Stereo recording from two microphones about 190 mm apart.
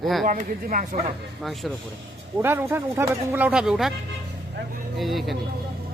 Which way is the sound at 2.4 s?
10° right (ahead or behind).